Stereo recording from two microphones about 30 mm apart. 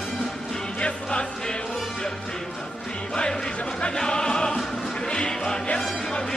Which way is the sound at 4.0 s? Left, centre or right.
Left.